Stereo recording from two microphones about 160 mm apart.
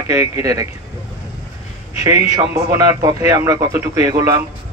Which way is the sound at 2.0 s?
20° right (ahead or behind).